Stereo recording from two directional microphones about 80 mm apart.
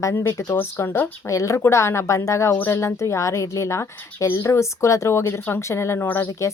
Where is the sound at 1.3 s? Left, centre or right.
Left.